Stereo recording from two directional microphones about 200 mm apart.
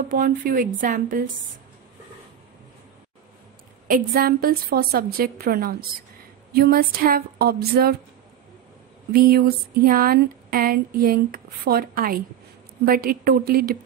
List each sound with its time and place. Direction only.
0.1 s speech: 45° right (ahead or behind)
3.8 s speech: 45° right (ahead or behind)
9.1 s speech: 50° right (ahead or behind)